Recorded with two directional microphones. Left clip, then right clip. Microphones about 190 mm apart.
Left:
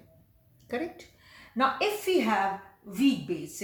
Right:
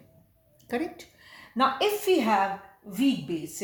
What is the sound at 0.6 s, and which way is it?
Speech, 45° right (ahead or behind).